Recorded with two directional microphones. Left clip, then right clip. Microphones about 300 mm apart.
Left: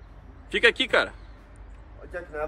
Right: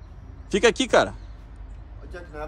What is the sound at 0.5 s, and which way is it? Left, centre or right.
Speech, centre.